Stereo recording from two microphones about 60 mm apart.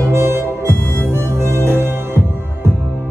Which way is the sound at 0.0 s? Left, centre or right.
Right.